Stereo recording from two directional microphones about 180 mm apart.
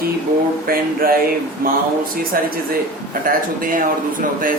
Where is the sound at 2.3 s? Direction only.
55° right (ahead or behind).